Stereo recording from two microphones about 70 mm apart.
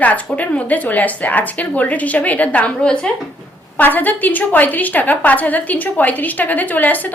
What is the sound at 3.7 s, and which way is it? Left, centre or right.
A woman's voice, left.